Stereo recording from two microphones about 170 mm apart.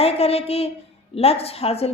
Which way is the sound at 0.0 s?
35° left (ahead or behind).